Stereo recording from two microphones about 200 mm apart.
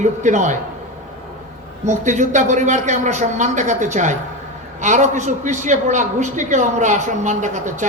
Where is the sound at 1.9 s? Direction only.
35° right (ahead or behind).